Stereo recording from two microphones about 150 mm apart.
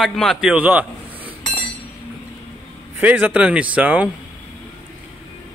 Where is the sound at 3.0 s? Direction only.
10° right (ahead or behind).